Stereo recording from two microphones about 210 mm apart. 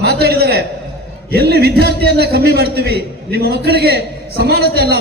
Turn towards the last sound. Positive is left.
turn(degrees=-50)  # may be behind; listen again after turning